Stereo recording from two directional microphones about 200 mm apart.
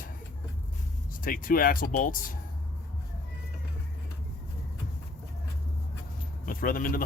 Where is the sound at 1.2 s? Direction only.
45° left (ahead or behind).